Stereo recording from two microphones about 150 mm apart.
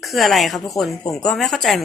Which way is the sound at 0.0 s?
Centre (ahead or behind).